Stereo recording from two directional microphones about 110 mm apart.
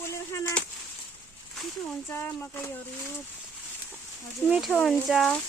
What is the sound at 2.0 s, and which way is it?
Speech, 20° left (ahead or behind).